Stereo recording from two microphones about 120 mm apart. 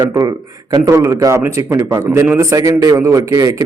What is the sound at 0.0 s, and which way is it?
A man's voice, 30° right (ahead or behind).